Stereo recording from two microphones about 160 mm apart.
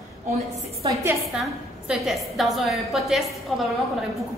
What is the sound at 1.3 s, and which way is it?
A woman's voice, 5° right (ahead or behind).